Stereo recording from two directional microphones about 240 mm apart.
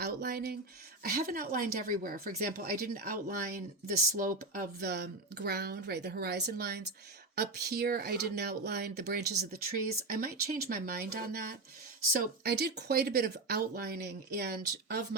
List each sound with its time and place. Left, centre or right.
0.0 s speech: right